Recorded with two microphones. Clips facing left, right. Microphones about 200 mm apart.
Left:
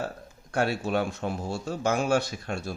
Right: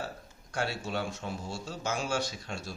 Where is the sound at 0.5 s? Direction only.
60° left (ahead or behind).